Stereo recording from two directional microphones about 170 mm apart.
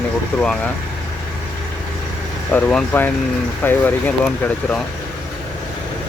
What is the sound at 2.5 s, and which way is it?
Speech, 10° left (ahead or behind).